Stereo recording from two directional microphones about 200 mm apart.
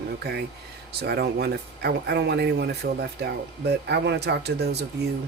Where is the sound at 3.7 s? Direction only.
55° right (ahead or behind).